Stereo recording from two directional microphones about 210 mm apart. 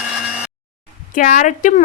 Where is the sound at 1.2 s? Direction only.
40° left (ahead or behind).